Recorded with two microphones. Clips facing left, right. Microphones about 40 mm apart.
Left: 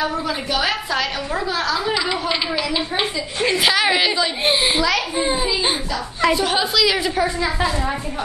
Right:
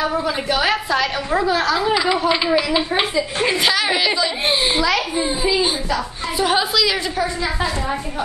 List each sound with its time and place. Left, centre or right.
0.2 s a woman's voice: centre
3.4 s a woman's voice: centre
3.7 s a child's voice: centre
5.1 s a child's voice: centre
6.3 s a woman's voice: centre